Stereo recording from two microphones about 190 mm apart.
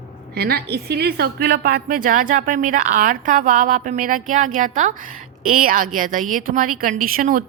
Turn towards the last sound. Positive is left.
turn(degrees=-45)  # may be behind; listen again after turning